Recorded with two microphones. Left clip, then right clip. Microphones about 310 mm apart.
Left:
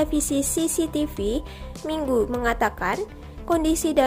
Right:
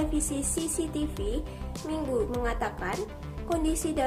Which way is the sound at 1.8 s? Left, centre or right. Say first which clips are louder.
Left 7 dB; left.